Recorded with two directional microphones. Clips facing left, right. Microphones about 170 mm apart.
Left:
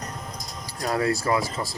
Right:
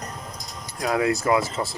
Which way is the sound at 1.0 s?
20° right (ahead or behind).